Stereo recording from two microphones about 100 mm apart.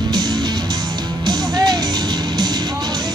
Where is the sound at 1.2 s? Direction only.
45° right (ahead or behind).